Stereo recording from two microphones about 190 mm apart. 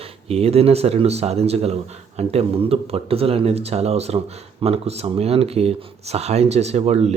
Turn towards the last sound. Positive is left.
turn(degrees=-35)  # may be behind; listen again after turning